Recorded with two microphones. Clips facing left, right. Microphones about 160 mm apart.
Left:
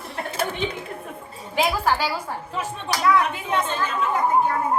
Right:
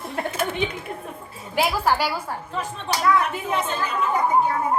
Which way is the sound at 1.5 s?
10° right (ahead or behind).